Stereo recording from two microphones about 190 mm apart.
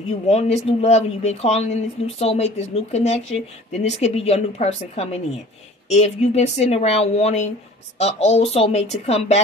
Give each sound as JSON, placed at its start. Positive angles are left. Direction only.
{"t": 0.3, "sound": "speech", "side_deg": 35}